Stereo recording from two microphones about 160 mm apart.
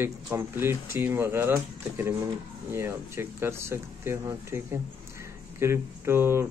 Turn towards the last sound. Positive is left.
turn(degrees=-15)  # may be behind; listen again after turning